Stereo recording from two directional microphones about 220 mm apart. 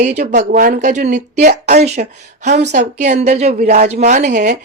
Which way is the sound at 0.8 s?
30° right (ahead or behind).